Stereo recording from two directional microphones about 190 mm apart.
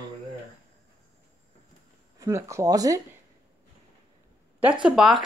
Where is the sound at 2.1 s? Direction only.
15° right (ahead or behind).